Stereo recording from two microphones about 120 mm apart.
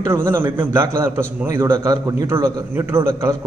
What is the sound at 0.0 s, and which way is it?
A man's voice, 20° right (ahead or behind).